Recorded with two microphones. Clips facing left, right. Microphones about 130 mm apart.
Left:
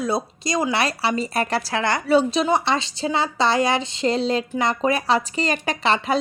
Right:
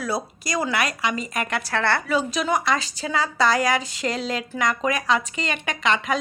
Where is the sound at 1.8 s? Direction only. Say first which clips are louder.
Right 1 dB; 15° left (ahead or behind).